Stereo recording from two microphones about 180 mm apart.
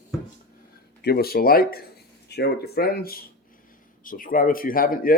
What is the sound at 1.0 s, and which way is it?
Speech, 60° left (ahead or behind).